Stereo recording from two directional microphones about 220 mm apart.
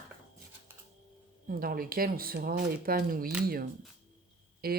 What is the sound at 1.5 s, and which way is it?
Speech, 40° right (ahead or behind).